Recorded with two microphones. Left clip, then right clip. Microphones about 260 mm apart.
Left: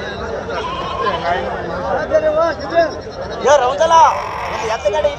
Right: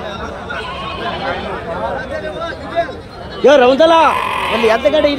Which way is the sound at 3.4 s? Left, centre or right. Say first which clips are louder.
Right 4 dB; right.